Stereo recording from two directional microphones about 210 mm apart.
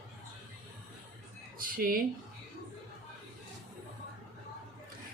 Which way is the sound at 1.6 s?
45° right (ahead or behind).